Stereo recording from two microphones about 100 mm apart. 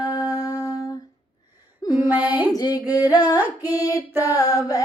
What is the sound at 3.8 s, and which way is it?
Music, 35° left (ahead or behind).